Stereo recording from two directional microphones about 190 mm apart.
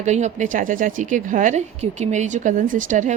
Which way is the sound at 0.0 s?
40° right (ahead or behind).